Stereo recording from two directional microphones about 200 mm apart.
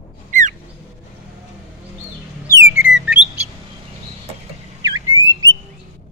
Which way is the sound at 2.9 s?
5° right (ahead or behind).